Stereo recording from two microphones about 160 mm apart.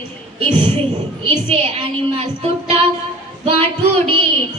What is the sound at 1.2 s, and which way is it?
A woman's voice, 40° right (ahead or behind).